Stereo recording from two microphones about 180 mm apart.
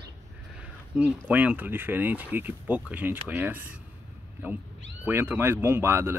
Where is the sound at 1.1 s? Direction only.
10° right (ahead or behind).